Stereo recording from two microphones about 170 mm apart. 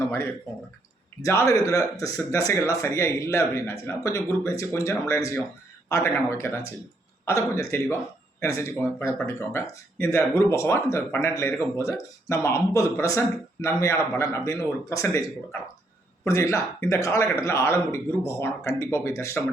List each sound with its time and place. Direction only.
0.1 s speech: 15° left (ahead or behind)
16.2 s speech: 15° left (ahead or behind)